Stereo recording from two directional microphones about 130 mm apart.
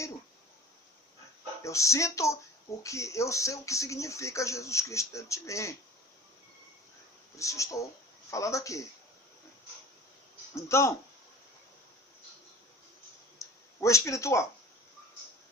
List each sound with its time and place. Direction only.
1.6 s speech: 25° left (ahead or behind)
7.3 s speech: 25° left (ahead or behind)
10.5 s speech: 20° left (ahead or behind)
13.4 s a sound: 25° left (ahead or behind)